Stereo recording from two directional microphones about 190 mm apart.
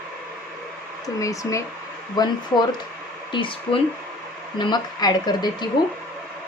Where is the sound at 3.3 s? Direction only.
25° left (ahead or behind).